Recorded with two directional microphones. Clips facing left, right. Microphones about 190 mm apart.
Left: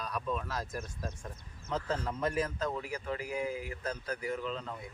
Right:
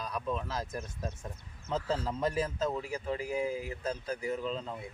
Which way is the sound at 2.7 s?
25° right (ahead or behind).